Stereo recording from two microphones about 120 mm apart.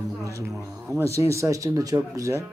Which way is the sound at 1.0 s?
25° right (ahead or behind).